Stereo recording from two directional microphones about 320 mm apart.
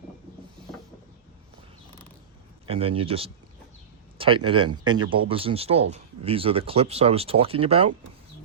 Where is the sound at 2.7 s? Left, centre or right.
Centre.